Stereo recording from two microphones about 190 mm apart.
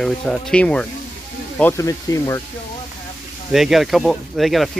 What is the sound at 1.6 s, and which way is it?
Speech, 15° left (ahead or behind).